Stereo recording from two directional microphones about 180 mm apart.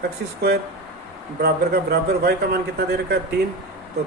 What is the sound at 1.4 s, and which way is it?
Speech, 60° right (ahead or behind).